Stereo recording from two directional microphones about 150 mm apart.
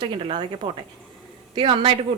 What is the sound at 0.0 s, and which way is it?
A woman's voice, 35° right (ahead or behind).